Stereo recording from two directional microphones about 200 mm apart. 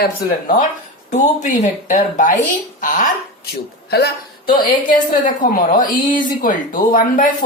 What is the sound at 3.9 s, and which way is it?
A woman's voice, 50° left (ahead or behind).